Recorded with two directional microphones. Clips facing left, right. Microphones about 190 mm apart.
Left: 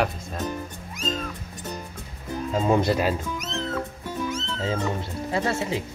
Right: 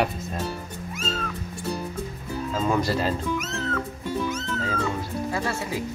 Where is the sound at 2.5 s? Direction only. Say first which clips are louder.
Left 3 dB; 20° left (ahead or behind).